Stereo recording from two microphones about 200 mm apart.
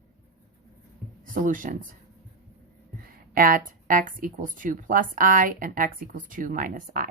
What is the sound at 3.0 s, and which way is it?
A woman's voice, 45° right (ahead or behind).